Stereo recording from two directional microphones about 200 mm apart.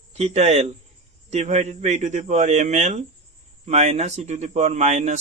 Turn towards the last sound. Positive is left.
turn(degrees=-35)  # may be behind; listen again after turning